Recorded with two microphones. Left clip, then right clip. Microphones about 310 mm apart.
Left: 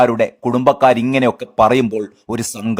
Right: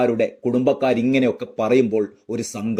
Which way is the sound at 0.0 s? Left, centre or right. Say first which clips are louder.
Left 6 dB; left.